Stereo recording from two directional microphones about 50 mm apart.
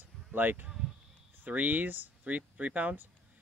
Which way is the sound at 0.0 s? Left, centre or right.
Right.